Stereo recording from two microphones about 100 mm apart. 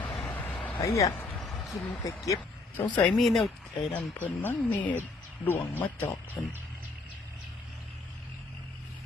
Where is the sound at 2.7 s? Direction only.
15° left (ahead or behind).